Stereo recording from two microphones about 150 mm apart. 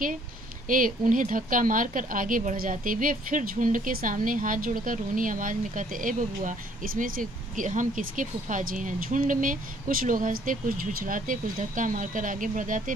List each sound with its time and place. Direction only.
0.7 s speech: 65° right (ahead or behind)